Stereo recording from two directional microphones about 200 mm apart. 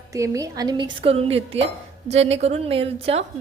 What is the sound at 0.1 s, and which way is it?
A woman's voice, 15° right (ahead or behind).